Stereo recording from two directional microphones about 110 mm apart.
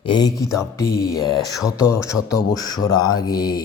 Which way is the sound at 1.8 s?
25° left (ahead or behind).